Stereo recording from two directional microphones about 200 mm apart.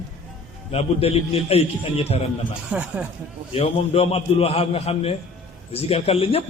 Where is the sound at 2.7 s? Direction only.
5° right (ahead or behind).